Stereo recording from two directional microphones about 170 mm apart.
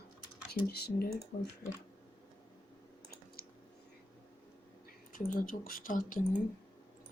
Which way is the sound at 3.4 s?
60° left (ahead or behind).